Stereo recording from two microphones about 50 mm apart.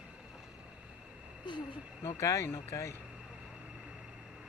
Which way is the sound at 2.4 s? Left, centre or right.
Left.